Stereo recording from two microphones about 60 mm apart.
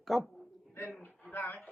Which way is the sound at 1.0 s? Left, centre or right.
Left.